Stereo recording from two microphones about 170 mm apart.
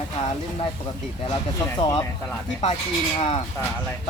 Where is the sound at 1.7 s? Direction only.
20° left (ahead or behind).